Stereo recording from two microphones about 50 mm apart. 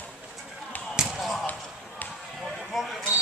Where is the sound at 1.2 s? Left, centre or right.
Centre.